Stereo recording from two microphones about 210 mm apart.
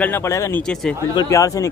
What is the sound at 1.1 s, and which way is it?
Speech, 20° left (ahead or behind).